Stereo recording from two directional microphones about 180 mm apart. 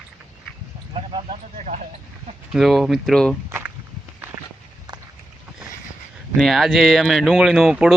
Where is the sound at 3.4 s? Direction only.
10° right (ahead or behind).